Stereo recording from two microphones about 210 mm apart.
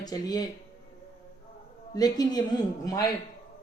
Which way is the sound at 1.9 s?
20° left (ahead or behind).